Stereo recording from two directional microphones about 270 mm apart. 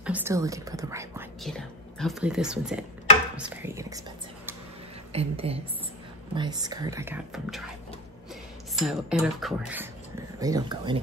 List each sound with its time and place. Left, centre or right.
0.0 s speech: centre
1.4 s speech: centre
5.1 s a woman's voice: right; by 7.7 s centre
8.7 s speech: centre
10.4 s speech: centre